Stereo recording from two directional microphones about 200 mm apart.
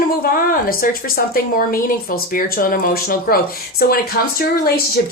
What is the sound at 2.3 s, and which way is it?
Speech, 45° left (ahead or behind).